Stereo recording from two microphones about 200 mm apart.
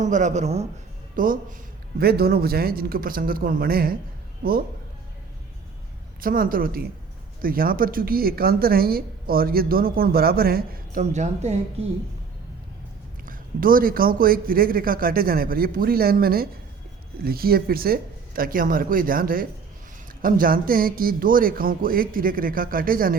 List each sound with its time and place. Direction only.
0.0 s a man's voice: 40° right (ahead or behind)
6.2 s a woman's voice: 45° right (ahead or behind)
13.2 s a woman's voice: 45° right (ahead or behind)